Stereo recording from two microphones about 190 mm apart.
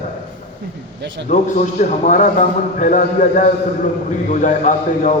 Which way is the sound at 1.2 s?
40° left (ahead or behind).